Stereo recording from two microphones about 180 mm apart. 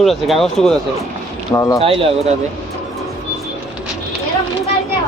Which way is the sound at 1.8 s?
30° right (ahead or behind).